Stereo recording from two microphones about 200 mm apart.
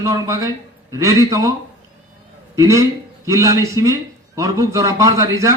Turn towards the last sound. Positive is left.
turn(degrees=-15)  # may be behind; listen again after turning